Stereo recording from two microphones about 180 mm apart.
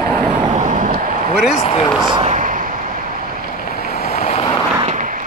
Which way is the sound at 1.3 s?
5° right (ahead or behind).